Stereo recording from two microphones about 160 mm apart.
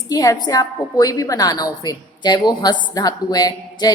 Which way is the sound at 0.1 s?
25° left (ahead or behind).